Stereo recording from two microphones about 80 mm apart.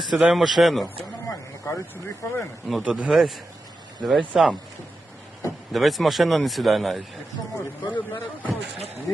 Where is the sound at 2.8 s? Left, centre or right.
Centre.